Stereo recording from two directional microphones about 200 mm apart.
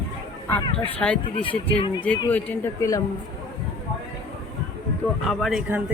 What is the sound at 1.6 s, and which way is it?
Speech, 25° left (ahead or behind).